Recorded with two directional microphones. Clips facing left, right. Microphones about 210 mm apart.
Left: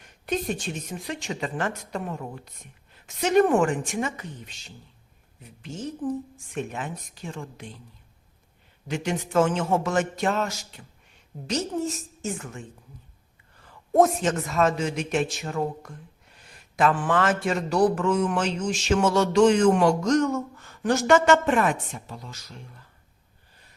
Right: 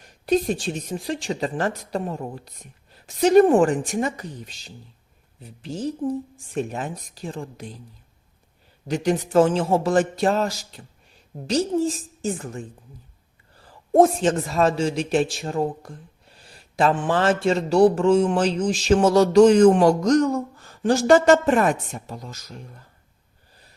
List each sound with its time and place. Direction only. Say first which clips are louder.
0.0 s a man's voice: right 7 dB; 35° right (ahead or behind)
8.9 s a man's voice: right 6 dB; 35° right (ahead or behind)